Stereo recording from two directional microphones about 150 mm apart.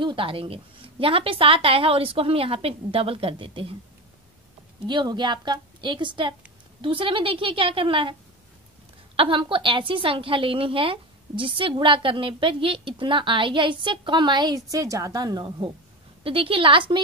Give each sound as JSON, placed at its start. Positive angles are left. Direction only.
{"t": 0.0, "sound": "a woman's voice", "side_deg": -35}
{"t": 4.8, "sound": "a woman's voice", "side_deg": -30}